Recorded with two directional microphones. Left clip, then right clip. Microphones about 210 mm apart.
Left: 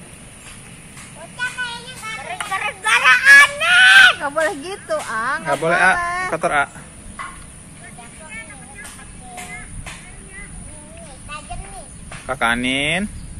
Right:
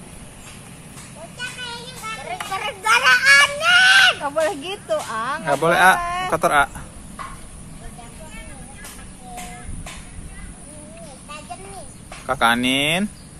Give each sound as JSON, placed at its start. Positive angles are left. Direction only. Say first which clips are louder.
{"t": 2.3, "sound": "a sound", "louder": "left 4 dB", "side_deg": -20}
{"t": 4.2, "sound": "speech", "louder": "left 1 dB", "side_deg": 40}
{"t": 5.4, "sound": "speech", "louder": "right 2 dB", "side_deg": -10}
{"t": 6.0, "sound": "a sound", "louder": "left 2 dB", "side_deg": 40}
{"t": 6.3, "sound": "speech", "louder": "right 3 dB", "side_deg": -5}
{"t": 12.3, "sound": "speech", "louder": "right 1 dB", "side_deg": -5}